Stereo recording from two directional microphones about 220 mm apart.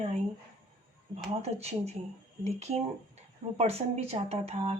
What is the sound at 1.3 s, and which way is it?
Speech, 30° right (ahead or behind).